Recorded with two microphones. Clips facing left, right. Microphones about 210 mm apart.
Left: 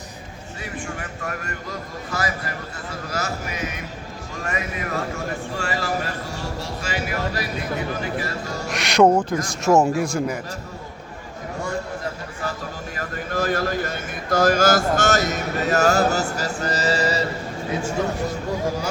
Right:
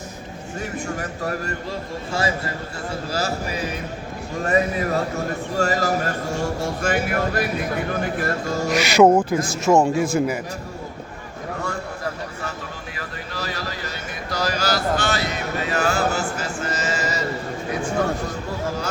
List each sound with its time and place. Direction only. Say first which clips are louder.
0.6 s a man's voice: right 4 dB; 40° right (ahead or behind)
8.7 s speech: right 2 dB; centre (ahead or behind)
13.0 s a sound: left 8 dB; 50° left (ahead or behind); by 17.2 s 35° left (ahead or behind)